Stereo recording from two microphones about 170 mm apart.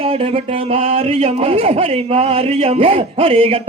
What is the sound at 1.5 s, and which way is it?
Speech, 35° right (ahead or behind).